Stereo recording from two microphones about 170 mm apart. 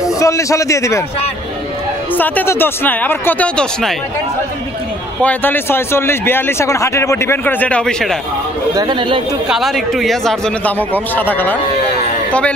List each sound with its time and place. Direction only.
0.0 s a man's voice: 20° left (ahead or behind)
2.1 s speech: 10° left (ahead or behind)
5.2 s speech: 10° left (ahead or behind)
8.7 s speech: 25° right (ahead or behind)
9.5 s a man's voice: centre (ahead or behind)